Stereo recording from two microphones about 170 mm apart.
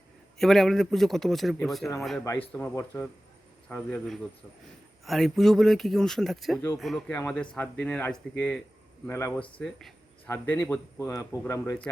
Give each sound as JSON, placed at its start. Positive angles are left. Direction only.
{"t": 0.3, "sound": "a man's voice", "side_deg": 0}
{"t": 2.5, "sound": "a man's voice", "side_deg": 10}
{"t": 9.6, "sound": "a man's voice", "side_deg": 5}